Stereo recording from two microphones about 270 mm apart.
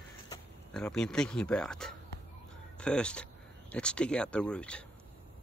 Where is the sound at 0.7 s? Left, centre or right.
Centre.